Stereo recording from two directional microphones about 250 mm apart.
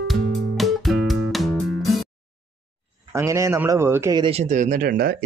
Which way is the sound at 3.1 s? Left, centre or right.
Centre.